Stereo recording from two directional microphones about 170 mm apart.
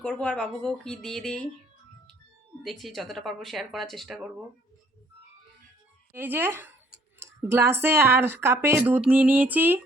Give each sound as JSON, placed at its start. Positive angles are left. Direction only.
{"t": 0.0, "sound": "speech", "side_deg": 5}
{"t": 2.6, "sound": "speech", "side_deg": 0}
{"t": 6.1, "sound": "speech", "side_deg": -10}